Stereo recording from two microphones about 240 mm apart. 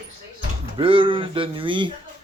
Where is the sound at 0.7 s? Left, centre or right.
Right.